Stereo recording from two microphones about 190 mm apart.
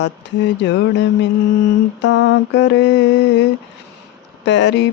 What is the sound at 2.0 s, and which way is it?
Mantra, 70° left (ahead or behind).